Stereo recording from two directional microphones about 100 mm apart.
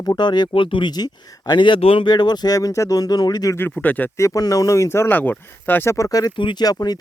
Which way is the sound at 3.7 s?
15° left (ahead or behind).